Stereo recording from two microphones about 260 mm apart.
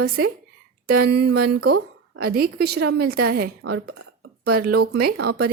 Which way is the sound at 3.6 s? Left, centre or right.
Right.